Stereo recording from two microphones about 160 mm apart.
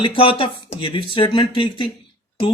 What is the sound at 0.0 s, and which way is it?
Speech, 35° left (ahead or behind).